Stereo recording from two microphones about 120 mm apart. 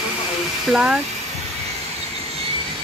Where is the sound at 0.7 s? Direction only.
5° right (ahead or behind).